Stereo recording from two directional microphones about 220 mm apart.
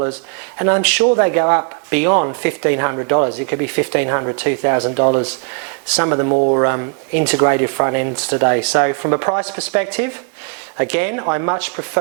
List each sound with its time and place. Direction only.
0.6 s speech: 10° right (ahead or behind)
6.3 s speech: 35° right (ahead or behind)
6.6 s speech: 15° right (ahead or behind)